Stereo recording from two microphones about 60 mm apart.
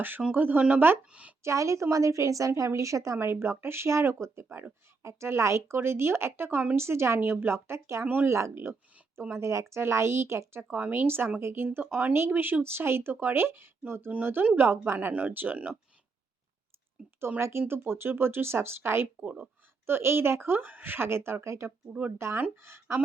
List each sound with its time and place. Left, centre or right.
0.3 s speech: right
1.4 s a woman's voice: right
8.0 s speech: right
8.3 s a woman's voice: right
10.6 s speech: right
10.9 s speech: right
17.2 s speech: right